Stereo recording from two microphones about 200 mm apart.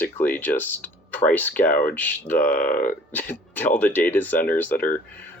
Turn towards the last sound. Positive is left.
turn(degrees=10)  # may be behind; listen again after turning